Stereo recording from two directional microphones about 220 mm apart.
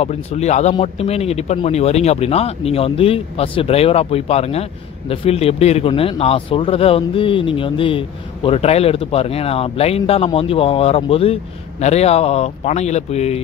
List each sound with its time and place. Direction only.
0.0 s speech: 30° left (ahead or behind)